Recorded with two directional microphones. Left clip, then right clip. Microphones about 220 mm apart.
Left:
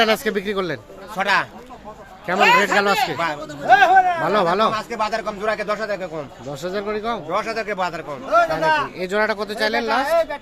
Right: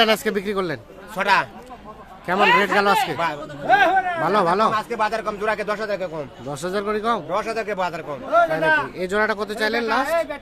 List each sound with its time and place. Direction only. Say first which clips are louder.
0.0 s speech: even; centre (ahead or behind)
1.1 s speech: even; 20° right (ahead or behind)
2.3 s speech: left 2 dB; centre (ahead or behind)
3.7 s a sound: left 4 dB; 35° left (ahead or behind)
4.2 s speech: even; centre (ahead or behind)
4.7 s speech: right 1 dB; 10° right (ahead or behind)
8.3 s a man's voice: left 1 dB; 30° left (ahead or behind)
9.0 s speech: left 1 dB; centre (ahead or behind)
10.0 s speech: left 3 dB; 15° left (ahead or behind)